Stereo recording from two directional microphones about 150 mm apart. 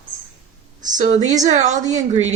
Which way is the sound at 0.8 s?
55° right (ahead or behind).